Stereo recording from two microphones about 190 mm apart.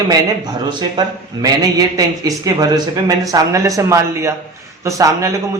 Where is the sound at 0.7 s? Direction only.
20° right (ahead or behind).